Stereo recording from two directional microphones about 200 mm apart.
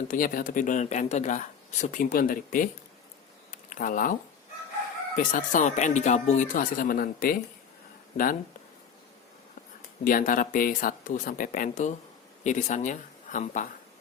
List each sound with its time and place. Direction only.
0.1 s speech: 45° left (ahead or behind)
3.5 s a sound: 40° left (ahead or behind)
5.1 s speech: 40° left (ahead or behind)
10.0 s speech: 45° left (ahead or behind)